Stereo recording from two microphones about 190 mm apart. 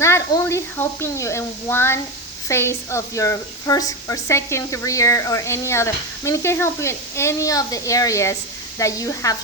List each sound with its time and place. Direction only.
0.0 s a woman's voice: 15° left (ahead or behind)